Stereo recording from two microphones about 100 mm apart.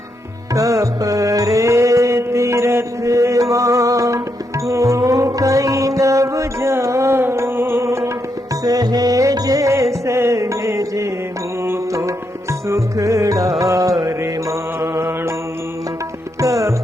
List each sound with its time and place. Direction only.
0.5 s music: 35° right (ahead or behind)
8.6 s music: 40° right (ahead or behind)
14.2 s mantra: 30° right (ahead or behind)
16.4 s music: 35° right (ahead or behind)